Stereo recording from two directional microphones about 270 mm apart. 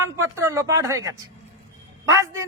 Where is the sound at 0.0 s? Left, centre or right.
Centre.